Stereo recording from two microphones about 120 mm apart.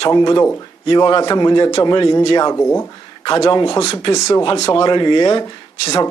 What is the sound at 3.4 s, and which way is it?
Speech, 45° left (ahead or behind).